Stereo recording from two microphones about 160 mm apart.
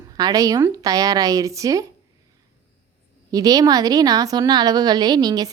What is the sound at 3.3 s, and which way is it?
A woman's voice, 25° right (ahead or behind).